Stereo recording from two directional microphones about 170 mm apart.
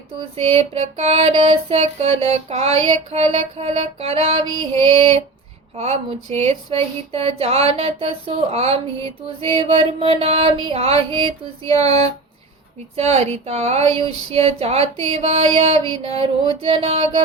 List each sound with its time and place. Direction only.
0.3 s speech: 35° right (ahead or behind)